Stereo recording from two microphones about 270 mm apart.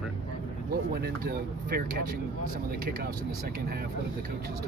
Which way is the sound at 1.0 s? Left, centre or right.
Right.